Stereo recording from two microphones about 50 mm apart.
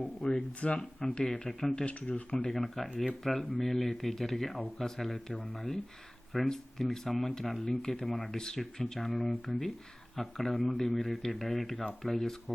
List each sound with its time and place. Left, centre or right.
0.2 s speech: centre
1.7 s speech: left
2.5 s speech: centre